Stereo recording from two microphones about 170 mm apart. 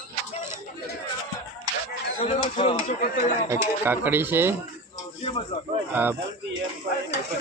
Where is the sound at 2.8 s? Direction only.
55° left (ahead or behind).